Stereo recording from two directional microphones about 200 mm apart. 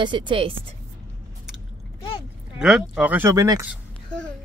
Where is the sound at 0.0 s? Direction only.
25° right (ahead or behind).